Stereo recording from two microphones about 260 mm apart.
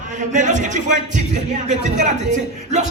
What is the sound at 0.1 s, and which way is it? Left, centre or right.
Speech, right.